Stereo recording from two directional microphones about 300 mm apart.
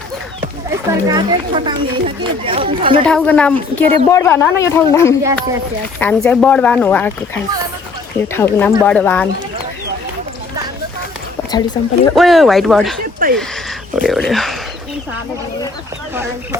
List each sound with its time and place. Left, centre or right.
0.7 s speech: centre
3.0 s speech: centre
5.2 s speech: centre
6.0 s speech: centre
8.3 s speech: centre
11.8 s speech: centre
12.1 s speech: centre
13.1 s a sound: right
13.9 s speech: centre